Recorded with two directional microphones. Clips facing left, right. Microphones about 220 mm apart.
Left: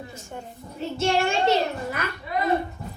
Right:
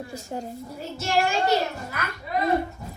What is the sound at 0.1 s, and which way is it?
Speech, 35° right (ahead or behind).